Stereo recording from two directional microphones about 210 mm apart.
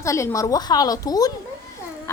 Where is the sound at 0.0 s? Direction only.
15° left (ahead or behind).